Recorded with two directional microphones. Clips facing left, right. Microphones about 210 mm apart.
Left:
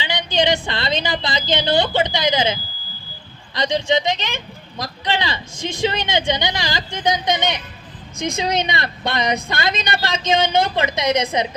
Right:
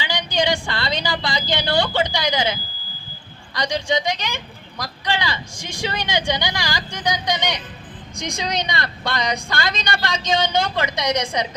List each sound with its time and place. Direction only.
0.0 s a woman's voice: 20° left (ahead or behind)